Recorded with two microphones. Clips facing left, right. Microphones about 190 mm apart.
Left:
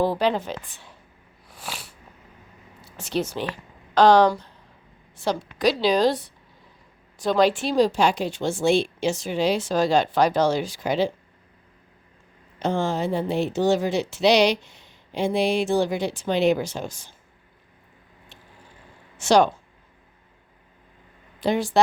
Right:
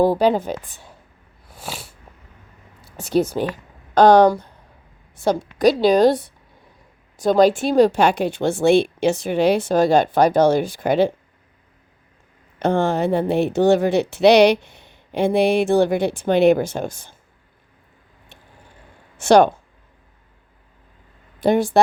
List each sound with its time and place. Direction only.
0.0 s a woman's voice: 45° right (ahead or behind)
1.5 s a sound: 25° right (ahead or behind)
3.1 s a woman's voice: 50° right (ahead or behind)
12.5 s speech: 60° right (ahead or behind)
19.1 s speech: 55° right (ahead or behind)
21.4 s a woman's voice: 55° right (ahead or behind)